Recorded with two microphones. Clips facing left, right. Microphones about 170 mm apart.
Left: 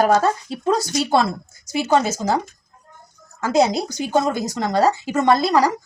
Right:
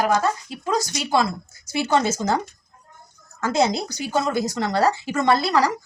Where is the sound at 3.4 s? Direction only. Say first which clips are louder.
Left 3 dB; 15° left (ahead or behind).